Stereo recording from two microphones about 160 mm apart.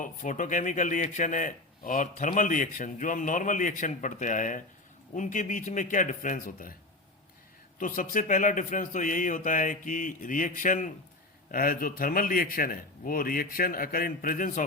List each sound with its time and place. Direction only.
0.0 s a man's voice: 55° left (ahead or behind)
7.8 s speech: 55° left (ahead or behind)